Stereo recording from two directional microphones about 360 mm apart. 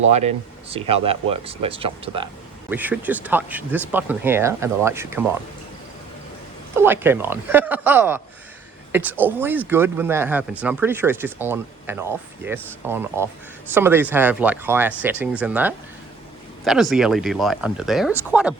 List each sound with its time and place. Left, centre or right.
0.1 s speech: centre
6.7 s speech: centre